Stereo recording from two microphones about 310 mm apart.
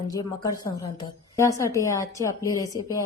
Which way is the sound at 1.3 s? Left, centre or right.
Centre.